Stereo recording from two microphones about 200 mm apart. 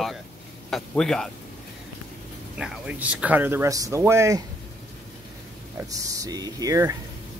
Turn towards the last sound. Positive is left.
turn(degrees=-15)  # may be behind; listen again after turning